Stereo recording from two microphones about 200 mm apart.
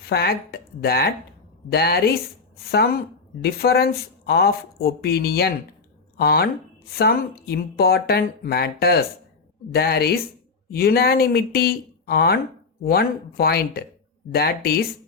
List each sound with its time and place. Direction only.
0.0 s speech: 50° left (ahead or behind)
3.4 s speech: 50° left (ahead or behind)